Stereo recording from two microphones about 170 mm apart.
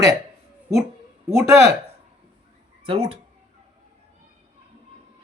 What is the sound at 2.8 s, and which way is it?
Speech, 35° right (ahead or behind).